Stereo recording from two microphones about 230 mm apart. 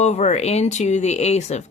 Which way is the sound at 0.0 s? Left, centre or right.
Left.